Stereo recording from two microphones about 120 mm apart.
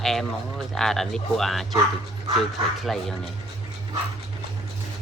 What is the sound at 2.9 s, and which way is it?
Speech, centre (ahead or behind).